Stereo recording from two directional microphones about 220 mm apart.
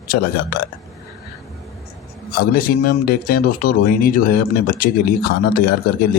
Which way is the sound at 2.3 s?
40° left (ahead or behind).